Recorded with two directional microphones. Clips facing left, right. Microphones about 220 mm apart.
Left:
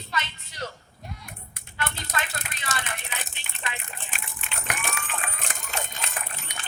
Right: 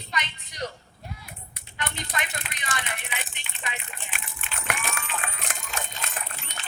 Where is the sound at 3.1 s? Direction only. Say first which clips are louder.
Right 1 dB; 45° left (ahead or behind).